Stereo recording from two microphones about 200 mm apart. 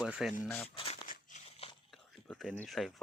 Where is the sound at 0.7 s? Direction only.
25° left (ahead or behind).